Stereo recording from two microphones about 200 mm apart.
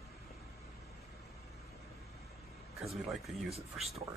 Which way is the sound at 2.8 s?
Centre (ahead or behind).